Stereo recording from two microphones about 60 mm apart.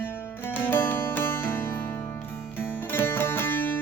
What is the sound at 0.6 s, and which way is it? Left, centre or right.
Music, left.